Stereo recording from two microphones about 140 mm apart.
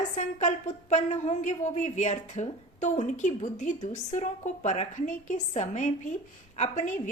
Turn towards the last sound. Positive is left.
turn(degrees=60)  # may be behind; listen again after turning